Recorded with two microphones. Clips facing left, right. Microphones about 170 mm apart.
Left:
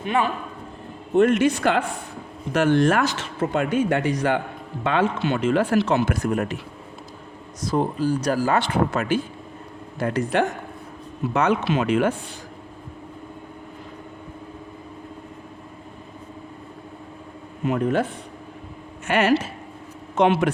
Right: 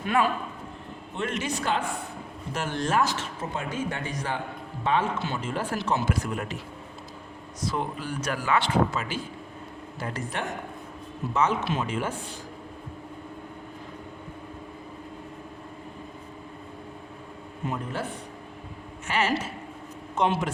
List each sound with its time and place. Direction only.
0.0 s a man's voice: 20° left (ahead or behind)
1.1 s speech: 50° left (ahead or behind)
7.7 s speech: 35° left (ahead or behind)
8.9 s speech: 55° left (ahead or behind)
10.0 s speech: 70° left (ahead or behind)
17.7 s a man's voice: 80° left
19.0 s speech: 60° left (ahead or behind)